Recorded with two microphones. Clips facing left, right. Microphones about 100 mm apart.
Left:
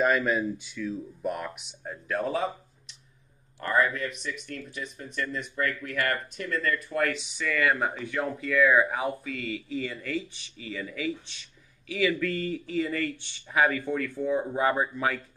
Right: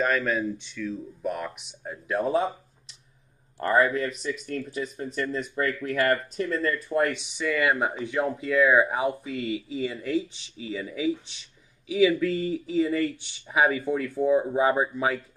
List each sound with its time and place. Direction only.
0.0 s speech: 5° left (ahead or behind)
3.5 s speech: 35° right (ahead or behind); by 8.0 s 10° right (ahead or behind)
8.0 s speech: 20° right (ahead or behind)